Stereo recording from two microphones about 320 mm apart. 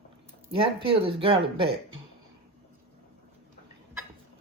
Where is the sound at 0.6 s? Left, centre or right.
Centre.